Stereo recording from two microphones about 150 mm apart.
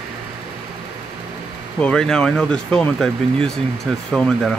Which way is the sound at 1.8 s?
5° left (ahead or behind).